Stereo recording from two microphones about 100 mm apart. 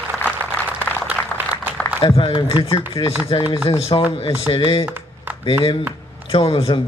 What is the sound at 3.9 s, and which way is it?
Speech, 55° left (ahead or behind).